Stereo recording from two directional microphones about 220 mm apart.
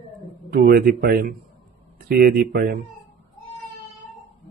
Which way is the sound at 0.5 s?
45° right (ahead or behind).